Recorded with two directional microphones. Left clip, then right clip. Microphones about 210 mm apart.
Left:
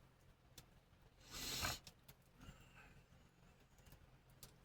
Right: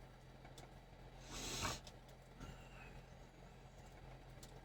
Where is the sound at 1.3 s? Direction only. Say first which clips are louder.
Even; 25° left (ahead or behind).